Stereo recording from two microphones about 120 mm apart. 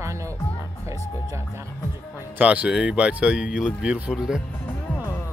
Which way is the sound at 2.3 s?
10° right (ahead or behind).